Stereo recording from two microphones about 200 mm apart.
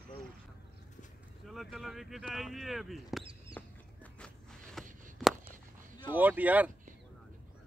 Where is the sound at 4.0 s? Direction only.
5° left (ahead or behind).